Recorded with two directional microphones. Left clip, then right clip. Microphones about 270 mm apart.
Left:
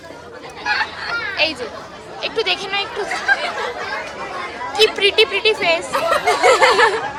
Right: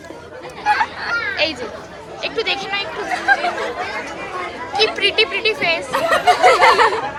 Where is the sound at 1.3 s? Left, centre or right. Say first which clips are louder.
Left 1 dB; centre.